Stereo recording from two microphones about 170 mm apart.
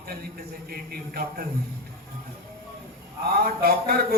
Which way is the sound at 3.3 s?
65° right (ahead or behind).